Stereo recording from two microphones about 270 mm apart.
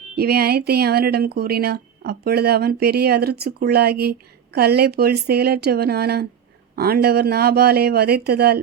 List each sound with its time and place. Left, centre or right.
0.2 s speech: right